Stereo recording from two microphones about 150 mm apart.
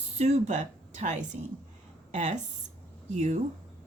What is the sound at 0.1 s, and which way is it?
A woman's voice, 50° right (ahead or behind).